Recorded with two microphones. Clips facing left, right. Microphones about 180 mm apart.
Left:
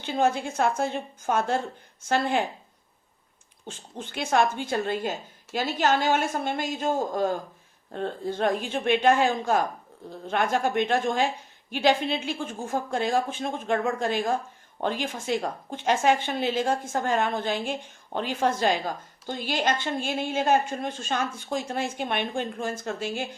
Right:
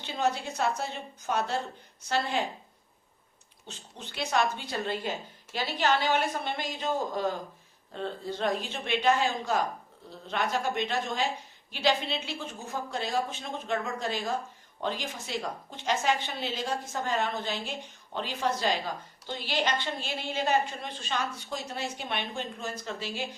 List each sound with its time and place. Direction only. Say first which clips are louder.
0.0 s a woman's voice: left 5 dB; 50° left (ahead or behind)
3.7 s a woman's voice: left 7 dB; 50° left (ahead or behind)